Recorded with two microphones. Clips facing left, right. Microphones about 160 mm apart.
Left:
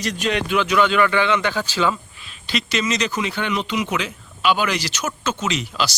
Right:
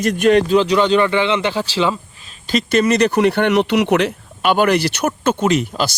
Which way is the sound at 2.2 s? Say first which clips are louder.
Right 7 dB; 45° right (ahead or behind).